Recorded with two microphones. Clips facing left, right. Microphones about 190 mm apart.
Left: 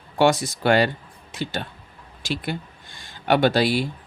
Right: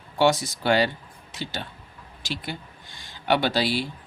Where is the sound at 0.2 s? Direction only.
55° left (ahead or behind).